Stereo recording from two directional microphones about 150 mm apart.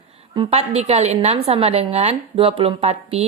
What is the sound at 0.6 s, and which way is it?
A woman's voice, 45° right (ahead or behind).